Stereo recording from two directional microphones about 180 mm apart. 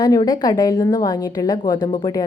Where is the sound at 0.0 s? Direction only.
20° left (ahead or behind).